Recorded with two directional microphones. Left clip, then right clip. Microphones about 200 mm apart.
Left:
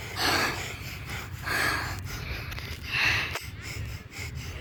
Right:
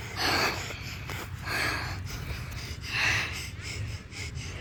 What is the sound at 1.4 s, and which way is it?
Snort, 15° left (ahead or behind).